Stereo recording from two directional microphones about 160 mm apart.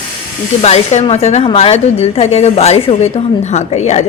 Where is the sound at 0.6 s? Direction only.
40° left (ahead or behind).